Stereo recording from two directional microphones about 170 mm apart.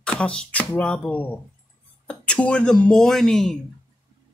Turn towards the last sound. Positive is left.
turn(degrees=5)  # may be behind; listen again after turning